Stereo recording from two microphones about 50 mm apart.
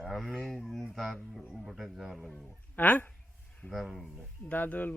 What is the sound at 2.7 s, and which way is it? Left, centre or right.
Speech, left.